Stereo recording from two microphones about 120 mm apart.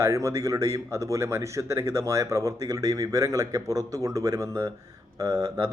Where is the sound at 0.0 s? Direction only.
25° right (ahead or behind).